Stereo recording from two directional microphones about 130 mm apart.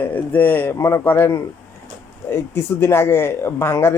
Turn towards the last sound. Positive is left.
turn(degrees=20)  # may be behind; listen again after turning